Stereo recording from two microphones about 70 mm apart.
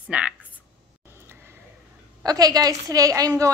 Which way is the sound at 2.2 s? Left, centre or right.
Right.